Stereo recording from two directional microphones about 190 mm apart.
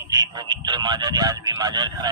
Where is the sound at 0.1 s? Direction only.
20° right (ahead or behind).